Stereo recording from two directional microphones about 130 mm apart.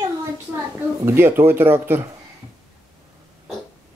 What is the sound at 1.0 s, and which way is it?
Speech, 20° right (ahead or behind).